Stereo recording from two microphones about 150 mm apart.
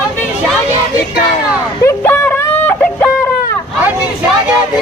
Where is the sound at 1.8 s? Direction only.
15° left (ahead or behind).